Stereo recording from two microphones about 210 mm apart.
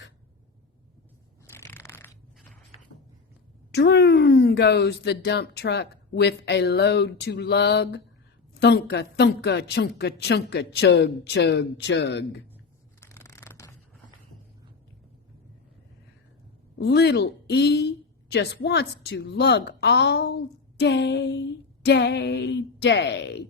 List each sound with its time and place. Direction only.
1.5 s crushing: 10° left (ahead or behind)
3.7 s a woman's voice: 50° left (ahead or behind)
13.0 s a sound: 15° left (ahead or behind)
16.7 s a woman's voice: 50° left (ahead or behind)